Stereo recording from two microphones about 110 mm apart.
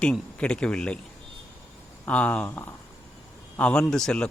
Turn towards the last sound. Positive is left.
turn(degrees=5)  # may be behind; listen again after turning